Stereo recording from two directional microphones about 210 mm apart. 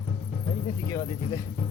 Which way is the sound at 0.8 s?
15° left (ahead or behind).